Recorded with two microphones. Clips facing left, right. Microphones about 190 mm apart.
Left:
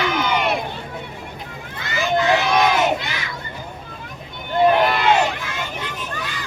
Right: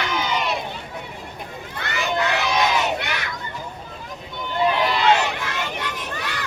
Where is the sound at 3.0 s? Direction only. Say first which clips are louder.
Right 1 dB; 65° right (ahead or behind).